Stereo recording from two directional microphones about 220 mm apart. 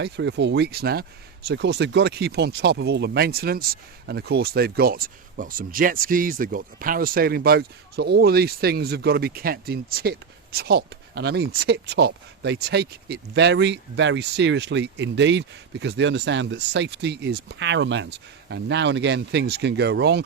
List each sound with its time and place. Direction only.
0.0 s speech: 55° right (ahead or behind)